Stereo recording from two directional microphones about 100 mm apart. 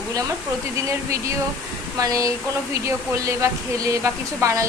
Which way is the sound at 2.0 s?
35° right (ahead or behind).